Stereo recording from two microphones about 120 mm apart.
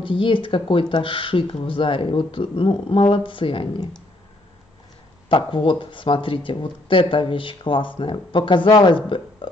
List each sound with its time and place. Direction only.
0.0 s speech: 45° left (ahead or behind)
5.3 s speech: 45° left (ahead or behind)